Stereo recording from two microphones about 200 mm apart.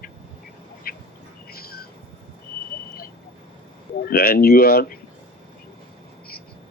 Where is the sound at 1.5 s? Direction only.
50° left (ahead or behind).